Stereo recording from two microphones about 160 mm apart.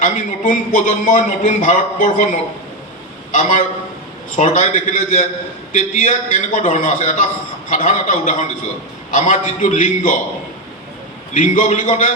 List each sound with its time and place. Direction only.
0.0 s a man's voice: 55° left (ahead or behind)
4.4 s a man's voice: 50° left (ahead or behind)
11.3 s a man's voice: 50° left (ahead or behind)